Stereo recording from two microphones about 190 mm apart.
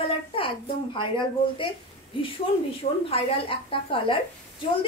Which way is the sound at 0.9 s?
25° left (ahead or behind).